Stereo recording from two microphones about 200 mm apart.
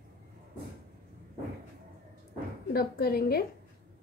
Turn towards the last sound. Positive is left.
turn(degrees=50)  # may be behind; listen again after turning